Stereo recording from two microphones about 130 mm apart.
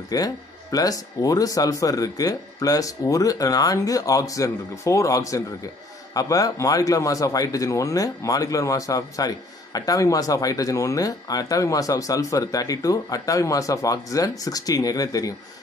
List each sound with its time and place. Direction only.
0.1 s speech: 30° left (ahead or behind)